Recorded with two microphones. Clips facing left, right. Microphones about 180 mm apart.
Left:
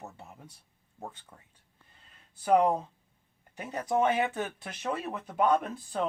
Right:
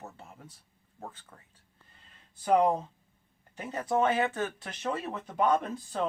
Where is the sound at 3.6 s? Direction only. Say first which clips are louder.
Even; 15° left (ahead or behind).